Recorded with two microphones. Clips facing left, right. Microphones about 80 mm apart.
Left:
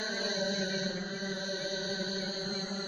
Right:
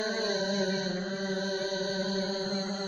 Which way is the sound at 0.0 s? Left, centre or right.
Right.